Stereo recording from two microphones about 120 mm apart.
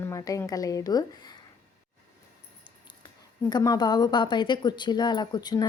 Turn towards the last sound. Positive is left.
turn(degrees=35)  # may be behind; listen again after turning